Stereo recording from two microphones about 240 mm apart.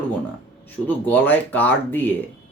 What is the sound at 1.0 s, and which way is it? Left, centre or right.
Speech, centre.